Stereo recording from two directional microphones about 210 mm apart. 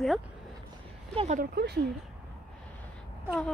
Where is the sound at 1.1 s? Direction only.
35° right (ahead or behind); by 1.9 s 50° right (ahead or behind).